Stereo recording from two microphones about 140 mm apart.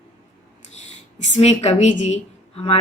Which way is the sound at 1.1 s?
60° left (ahead or behind).